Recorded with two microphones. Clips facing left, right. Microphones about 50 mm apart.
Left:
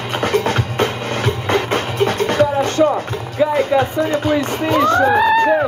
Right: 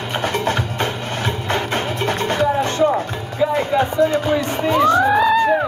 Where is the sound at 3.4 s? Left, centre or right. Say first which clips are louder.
Left 3 dB; left.